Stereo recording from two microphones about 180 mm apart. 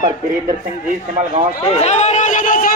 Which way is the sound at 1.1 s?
30° right (ahead or behind).